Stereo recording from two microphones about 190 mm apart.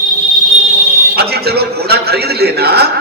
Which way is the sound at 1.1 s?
55° right (ahead or behind).